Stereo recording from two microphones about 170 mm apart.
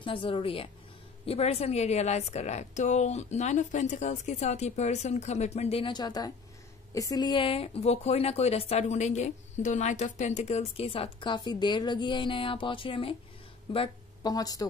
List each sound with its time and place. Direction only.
0.0 s speech: 30° left (ahead or behind)